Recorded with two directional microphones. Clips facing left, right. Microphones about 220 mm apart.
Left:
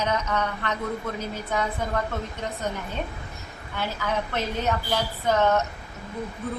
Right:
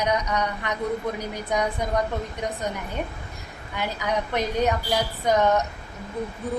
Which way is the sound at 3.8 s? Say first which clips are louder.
Right 1 dB; 15° right (ahead or behind).